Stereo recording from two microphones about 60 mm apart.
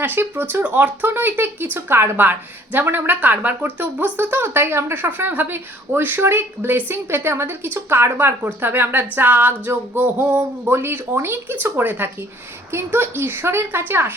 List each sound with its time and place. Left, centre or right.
0.0 s speech: right
5.0 s speech: right